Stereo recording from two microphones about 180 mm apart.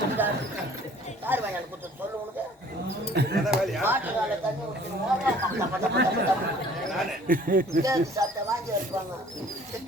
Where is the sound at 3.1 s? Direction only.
60° right (ahead or behind).